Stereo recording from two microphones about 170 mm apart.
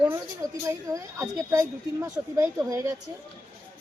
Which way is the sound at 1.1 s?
20° right (ahead or behind).